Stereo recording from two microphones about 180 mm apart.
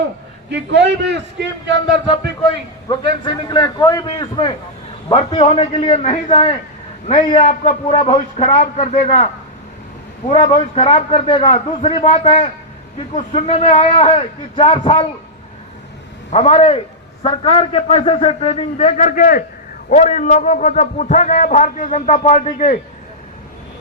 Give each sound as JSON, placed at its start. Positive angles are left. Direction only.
{"t": 0.5, "sound": "a man's voice", "side_deg": -75}
{"t": 2.9, "sound": "a man's voice", "side_deg": 25}
{"t": 7.4, "sound": "a man's voice", "side_deg": 40}
{"t": 16.3, "sound": "a man's voice", "side_deg": 35}